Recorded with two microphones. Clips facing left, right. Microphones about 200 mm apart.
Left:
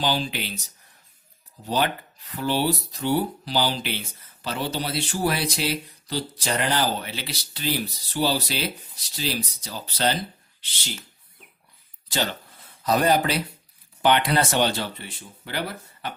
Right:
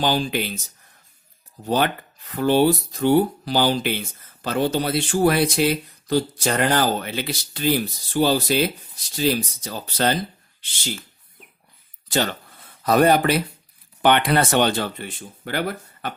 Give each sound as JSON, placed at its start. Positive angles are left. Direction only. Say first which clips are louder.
{"t": 0.0, "sound": "speech", "louder": "right 4 dB", "side_deg": -50}
{"t": 1.6, "sound": "speech", "louder": "right 3 dB", "side_deg": -50}
{"t": 12.8, "sound": "speech", "louder": "right 4 dB", "side_deg": -55}